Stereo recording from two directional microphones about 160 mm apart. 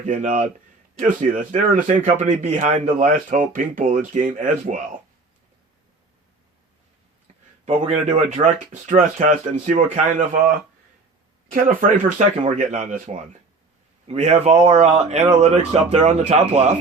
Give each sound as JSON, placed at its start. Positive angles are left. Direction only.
{"t": 0.0, "sound": "speech", "side_deg": -50}
{"t": 7.6, "sound": "speech", "side_deg": -45}
{"t": 11.8, "sound": "speech", "side_deg": -50}